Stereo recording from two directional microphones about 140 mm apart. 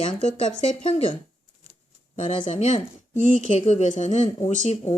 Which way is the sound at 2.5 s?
55° left (ahead or behind).